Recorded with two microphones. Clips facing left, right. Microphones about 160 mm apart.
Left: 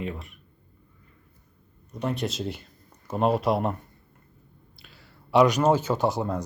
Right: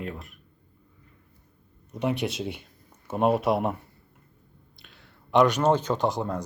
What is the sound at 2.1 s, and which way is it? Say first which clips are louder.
Speech: right 1 dB; 65° right (ahead or behind).